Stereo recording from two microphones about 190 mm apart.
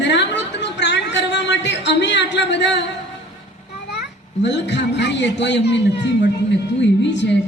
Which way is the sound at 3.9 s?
65° left (ahead or behind).